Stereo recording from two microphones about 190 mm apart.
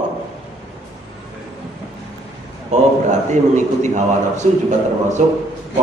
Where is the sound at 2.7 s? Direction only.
40° right (ahead or behind).